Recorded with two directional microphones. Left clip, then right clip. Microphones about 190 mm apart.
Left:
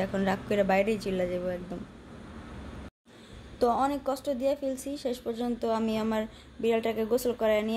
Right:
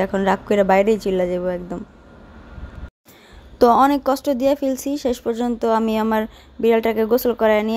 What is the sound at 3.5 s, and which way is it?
Speech, 45° right (ahead or behind).